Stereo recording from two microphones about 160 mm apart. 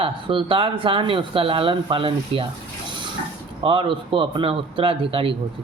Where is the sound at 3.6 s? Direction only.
35° right (ahead or behind).